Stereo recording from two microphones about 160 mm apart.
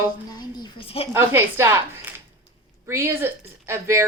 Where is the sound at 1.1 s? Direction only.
15° right (ahead or behind).